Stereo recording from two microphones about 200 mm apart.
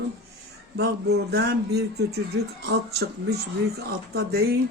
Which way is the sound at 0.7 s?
55° right (ahead or behind).